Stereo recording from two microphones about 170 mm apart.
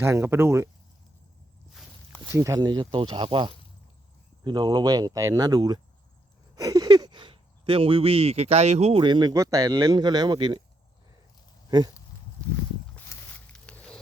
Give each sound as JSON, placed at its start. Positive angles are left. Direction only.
{"t": 0.0, "sound": "speech", "side_deg": -15}
{"t": 2.2, "sound": "speech", "side_deg": -15}
{"t": 13.1, "sound": "a sound", "side_deg": 10}